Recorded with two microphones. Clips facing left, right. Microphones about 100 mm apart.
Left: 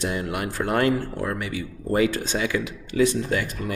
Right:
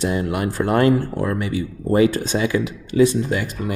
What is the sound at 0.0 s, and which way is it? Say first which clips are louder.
Speech: right 5 dB; 35° right (ahead or behind).